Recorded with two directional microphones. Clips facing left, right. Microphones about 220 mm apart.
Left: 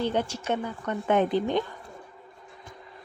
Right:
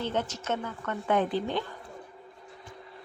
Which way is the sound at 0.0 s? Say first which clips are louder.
Left 4 dB; 10° left (ahead or behind).